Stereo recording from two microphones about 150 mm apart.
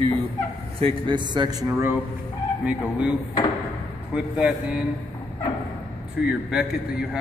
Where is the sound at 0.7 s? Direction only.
35° right (ahead or behind).